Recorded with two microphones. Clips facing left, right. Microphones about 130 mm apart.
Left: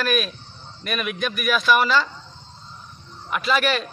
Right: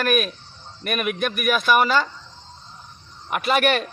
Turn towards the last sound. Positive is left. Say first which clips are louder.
# right 2 dB
turn(degrees=-55)  # may be behind; listen again after turning